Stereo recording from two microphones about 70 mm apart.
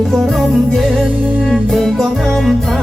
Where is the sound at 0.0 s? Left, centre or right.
Centre.